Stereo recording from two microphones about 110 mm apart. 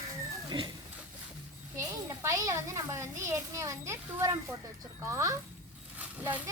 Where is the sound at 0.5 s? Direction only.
50° right (ahead or behind).